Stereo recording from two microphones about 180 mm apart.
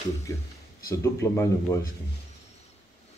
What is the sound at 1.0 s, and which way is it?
Speech, 15° left (ahead or behind).